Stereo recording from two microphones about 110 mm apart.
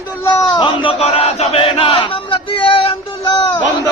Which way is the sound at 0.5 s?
50° left (ahead or behind).